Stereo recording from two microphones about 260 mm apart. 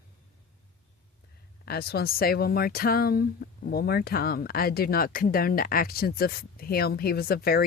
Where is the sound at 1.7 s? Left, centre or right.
Left.